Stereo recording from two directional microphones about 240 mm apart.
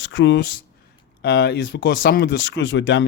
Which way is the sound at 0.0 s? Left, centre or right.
Left.